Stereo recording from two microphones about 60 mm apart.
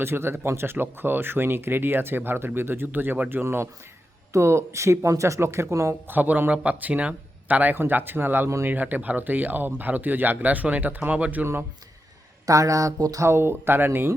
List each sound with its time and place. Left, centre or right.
0.0 s a man's voice: right
6.1 s speech: right
12.5 s speech: right
13.2 s speech: right